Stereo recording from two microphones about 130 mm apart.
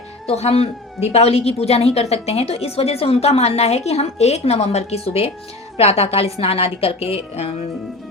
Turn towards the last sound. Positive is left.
turn(degrees=50)  # may be behind; listen again after turning